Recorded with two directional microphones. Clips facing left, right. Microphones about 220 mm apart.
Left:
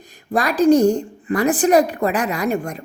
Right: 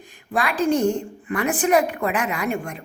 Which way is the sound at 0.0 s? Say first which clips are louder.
Left 4 dB; 40° left (ahead or behind).